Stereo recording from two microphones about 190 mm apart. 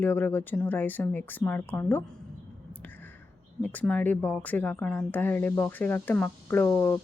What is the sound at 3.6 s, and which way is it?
Speech, 5° left (ahead or behind).